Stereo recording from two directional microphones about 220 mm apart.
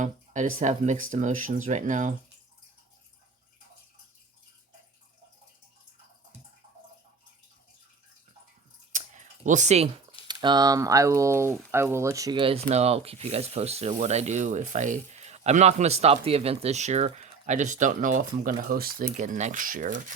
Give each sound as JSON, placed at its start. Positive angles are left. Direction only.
{"t": 0.0, "sound": "speech", "side_deg": -35}
{"t": 9.1, "sound": "a sound", "side_deg": -35}
{"t": 10.2, "sound": "speech", "side_deg": -20}